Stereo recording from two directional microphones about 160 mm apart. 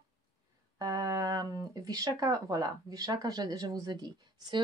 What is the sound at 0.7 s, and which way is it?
Speech, 20° right (ahead or behind).